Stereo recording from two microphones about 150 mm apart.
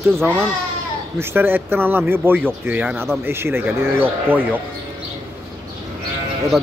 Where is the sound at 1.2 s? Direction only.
15° right (ahead or behind).